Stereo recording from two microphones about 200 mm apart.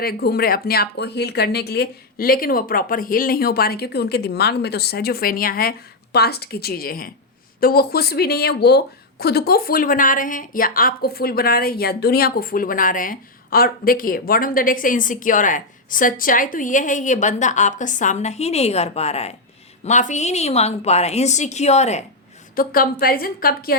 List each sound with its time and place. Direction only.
0.0 s a woman's voice: 50° left (ahead or behind); by 22.0 s 35° left (ahead or behind)
22.5 s speech: 45° left (ahead or behind)